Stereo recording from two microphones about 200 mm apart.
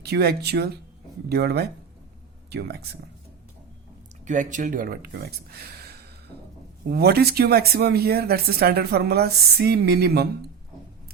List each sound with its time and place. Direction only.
0.0 s speech: 55° right (ahead or behind)
4.3 s speech: 40° right (ahead or behind)